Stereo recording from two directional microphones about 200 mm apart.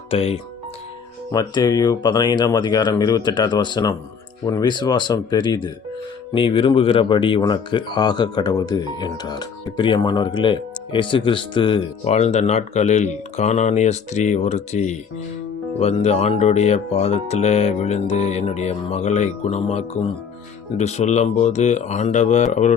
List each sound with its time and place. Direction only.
0.1 s speech: 30° left (ahead or behind)
1.3 s speech: 20° left (ahead or behind); by 22.7 s 35° left (ahead or behind)